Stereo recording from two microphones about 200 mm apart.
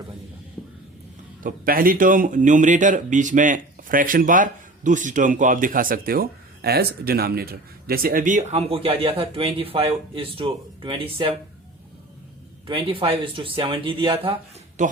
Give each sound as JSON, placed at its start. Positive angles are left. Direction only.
{"t": 1.5, "sound": "speech", "side_deg": -45}
{"t": 12.6, "sound": "speech", "side_deg": -25}
{"t": 14.8, "sound": "speech", "side_deg": -35}